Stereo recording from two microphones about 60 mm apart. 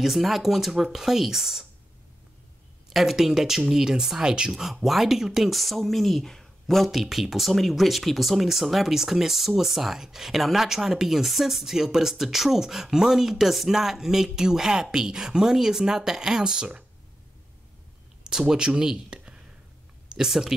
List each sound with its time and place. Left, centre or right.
0.0 s speech: centre
2.9 s speech: centre
18.2 s speech: centre